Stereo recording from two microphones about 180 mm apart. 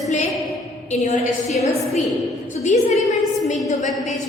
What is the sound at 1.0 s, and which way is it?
Speech, 40° left (ahead or behind).